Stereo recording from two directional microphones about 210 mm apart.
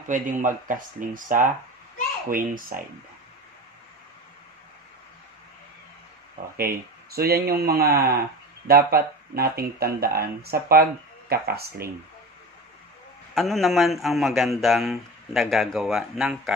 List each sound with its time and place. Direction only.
0.1 s speech: 40° right (ahead or behind)
6.5 s speech: 45° right (ahead or behind)
13.3 s speech: centre (ahead or behind)